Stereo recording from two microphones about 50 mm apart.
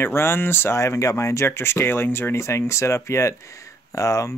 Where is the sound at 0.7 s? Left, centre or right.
Left.